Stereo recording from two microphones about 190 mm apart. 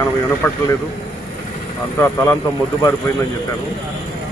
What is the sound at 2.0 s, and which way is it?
Speech, 15° left (ahead or behind).